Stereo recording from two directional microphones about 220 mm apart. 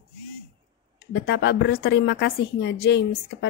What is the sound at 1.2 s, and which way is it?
Speech, 50° left (ahead or behind).